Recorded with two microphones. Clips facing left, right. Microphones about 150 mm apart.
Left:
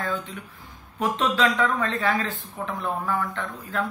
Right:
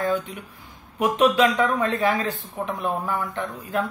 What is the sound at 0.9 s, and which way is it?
A man's voice, 15° right (ahead or behind).